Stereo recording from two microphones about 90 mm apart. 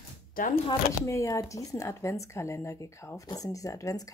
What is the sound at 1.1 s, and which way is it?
A woman's voice, 35° left (ahead or behind).